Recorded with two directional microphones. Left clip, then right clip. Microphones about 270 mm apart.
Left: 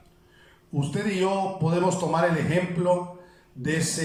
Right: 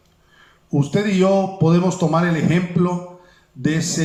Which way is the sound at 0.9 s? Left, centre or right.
Right.